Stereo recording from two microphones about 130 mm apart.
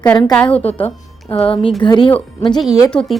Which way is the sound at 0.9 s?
45° left (ahead or behind).